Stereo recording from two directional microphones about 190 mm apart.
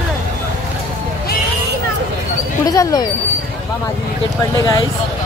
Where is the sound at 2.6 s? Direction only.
20° left (ahead or behind).